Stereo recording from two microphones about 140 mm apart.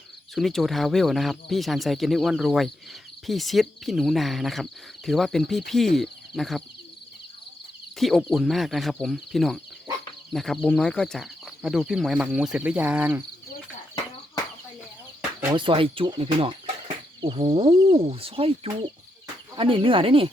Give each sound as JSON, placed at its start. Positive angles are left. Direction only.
{"t": 0.3, "sound": "speech", "side_deg": 0}
{"t": 7.9, "sound": "speech", "side_deg": 0}
{"t": 15.5, "sound": "speech", "side_deg": -35}
{"t": 17.4, "sound": "speech", "side_deg": -45}